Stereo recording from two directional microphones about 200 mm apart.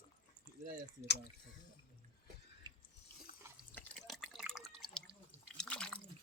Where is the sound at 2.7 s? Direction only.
20° right (ahead or behind).